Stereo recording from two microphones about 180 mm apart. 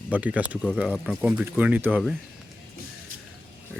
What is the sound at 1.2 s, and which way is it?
Speech, 10° right (ahead or behind).